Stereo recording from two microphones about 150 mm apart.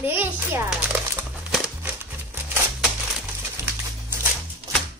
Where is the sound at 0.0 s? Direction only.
15° right (ahead or behind).